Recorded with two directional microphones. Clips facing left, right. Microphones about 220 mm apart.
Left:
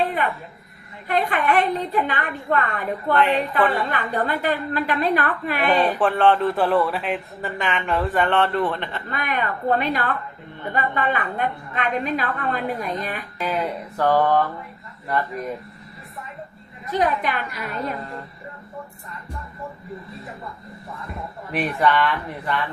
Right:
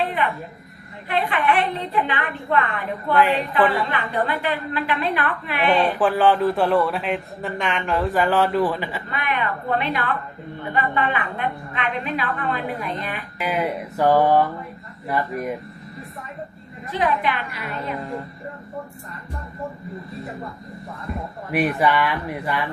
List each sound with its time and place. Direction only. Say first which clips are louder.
1.0 s a woman's voice: even; 45° left (ahead or behind)
3.1 s speech: right 1 dB; centre (ahead or behind)
3.9 s a woman's voice: even; 45° left (ahead or behind)
5.6 s speech: right 1 dB; centre (ahead or behind)
9.1 s a woman's voice: even; 40° left (ahead or behind)
13.4 s speech: right 2 dB; 10° right (ahead or behind)
17.0 s a woman's voice: even; 45° left (ahead or behind)
21.5 s speech: right 1 dB; 10° right (ahead or behind)